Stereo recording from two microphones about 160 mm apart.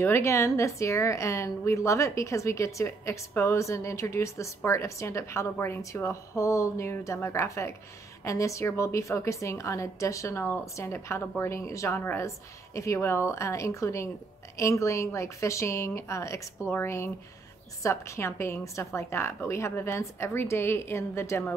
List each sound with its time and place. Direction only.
0.0 s a woman's voice: 15° left (ahead or behind)